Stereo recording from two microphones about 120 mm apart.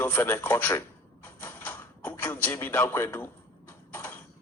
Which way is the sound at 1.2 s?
15° left (ahead or behind).